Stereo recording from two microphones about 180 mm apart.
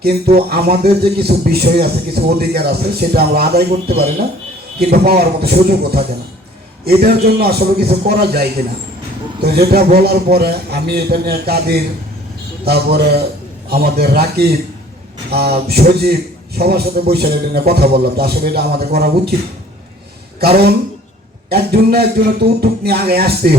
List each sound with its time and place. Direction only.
0.0 s speech: 60° right (ahead or behind)
20.4 s speech: 60° right (ahead or behind)